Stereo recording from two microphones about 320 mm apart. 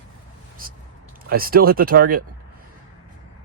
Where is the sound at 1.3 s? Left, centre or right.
Right.